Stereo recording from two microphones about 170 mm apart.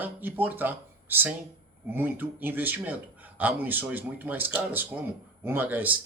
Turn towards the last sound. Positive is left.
turn(degrees=-10)  # may be behind; listen again after turning